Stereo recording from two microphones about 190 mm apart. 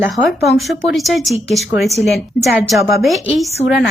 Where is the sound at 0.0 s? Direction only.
Centre (ahead or behind).